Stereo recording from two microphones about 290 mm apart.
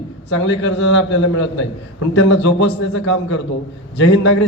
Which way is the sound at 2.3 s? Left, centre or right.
Left.